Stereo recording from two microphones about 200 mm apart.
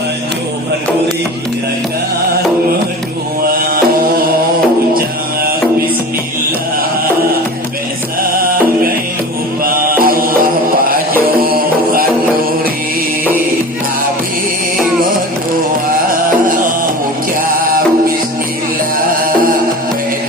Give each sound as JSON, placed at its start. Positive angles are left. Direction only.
{"t": 4.9, "sound": "music", "side_deg": -50}
{"t": 9.6, "sound": "music", "side_deg": -45}
{"t": 18.9, "sound": "music", "side_deg": -45}